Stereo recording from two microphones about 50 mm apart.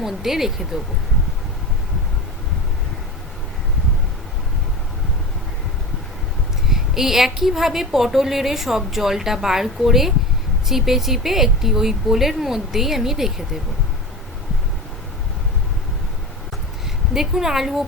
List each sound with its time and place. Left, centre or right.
0.0 s a woman's voice: centre
6.7 s a woman's voice: centre
17.2 s a woman's voice: centre